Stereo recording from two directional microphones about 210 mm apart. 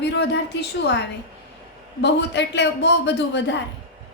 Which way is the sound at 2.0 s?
55° left (ahead or behind).